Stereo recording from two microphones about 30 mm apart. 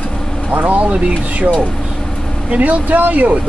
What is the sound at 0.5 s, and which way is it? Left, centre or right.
Speech, right.